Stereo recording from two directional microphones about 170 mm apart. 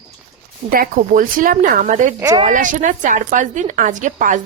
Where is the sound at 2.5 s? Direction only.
50° right (ahead or behind).